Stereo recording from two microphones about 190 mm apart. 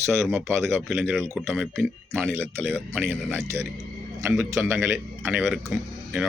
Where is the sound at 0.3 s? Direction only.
Centre (ahead or behind).